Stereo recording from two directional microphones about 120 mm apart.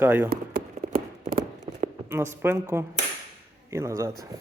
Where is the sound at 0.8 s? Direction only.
70° right (ahead or behind).